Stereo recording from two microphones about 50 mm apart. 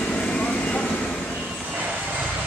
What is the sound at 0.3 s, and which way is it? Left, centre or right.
Vehicle, centre.